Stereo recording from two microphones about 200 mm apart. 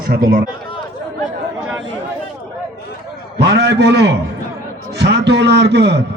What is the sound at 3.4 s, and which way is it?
A man's voice, 55° right (ahead or behind).